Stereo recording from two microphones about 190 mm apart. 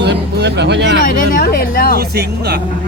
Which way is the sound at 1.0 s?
50° left (ahead or behind).